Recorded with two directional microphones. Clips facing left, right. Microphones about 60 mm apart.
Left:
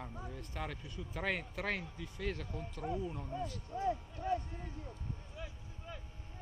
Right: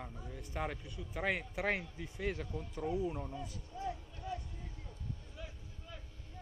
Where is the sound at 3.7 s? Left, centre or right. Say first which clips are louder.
Left 6 dB; left.